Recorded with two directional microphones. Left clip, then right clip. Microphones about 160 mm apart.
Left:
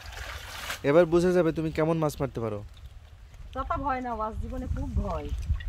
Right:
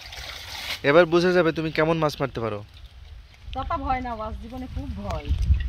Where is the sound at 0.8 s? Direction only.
10° left (ahead or behind).